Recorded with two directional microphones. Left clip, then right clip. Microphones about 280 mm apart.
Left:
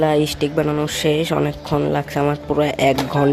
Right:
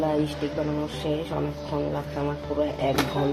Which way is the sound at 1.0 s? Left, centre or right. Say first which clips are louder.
Left 11 dB; left.